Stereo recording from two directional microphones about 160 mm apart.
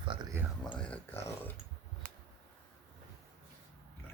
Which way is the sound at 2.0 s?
55° right (ahead or behind).